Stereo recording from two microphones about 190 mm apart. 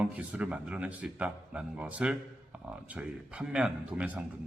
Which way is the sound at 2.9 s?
5° right (ahead or behind).